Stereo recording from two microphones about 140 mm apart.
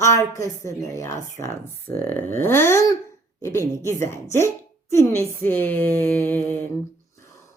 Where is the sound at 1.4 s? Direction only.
15° left (ahead or behind).